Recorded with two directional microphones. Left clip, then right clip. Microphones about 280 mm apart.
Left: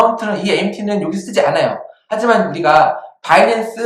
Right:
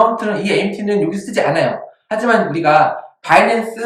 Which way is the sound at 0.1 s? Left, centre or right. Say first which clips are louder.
Even; centre.